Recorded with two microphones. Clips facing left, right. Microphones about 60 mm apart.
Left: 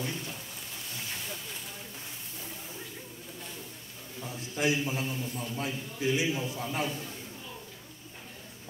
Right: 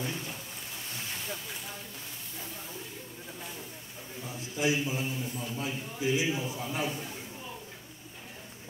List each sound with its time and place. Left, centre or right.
0.0 s a sound: centre
4.6 s a man's voice: left
5.0 s a man's voice: centre
5.9 s a man's voice: left
6.2 s a man's voice: centre